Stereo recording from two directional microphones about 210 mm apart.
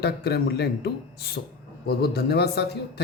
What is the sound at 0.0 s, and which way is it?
Speech, 50° left (ahead or behind).